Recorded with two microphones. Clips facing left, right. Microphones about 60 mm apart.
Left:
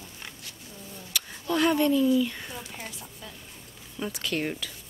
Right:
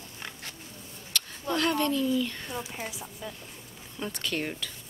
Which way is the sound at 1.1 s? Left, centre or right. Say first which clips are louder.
Even; centre.